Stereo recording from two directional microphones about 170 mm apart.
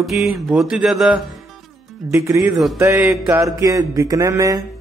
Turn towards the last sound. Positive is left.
turn(degrees=-20)  # may be behind; listen again after turning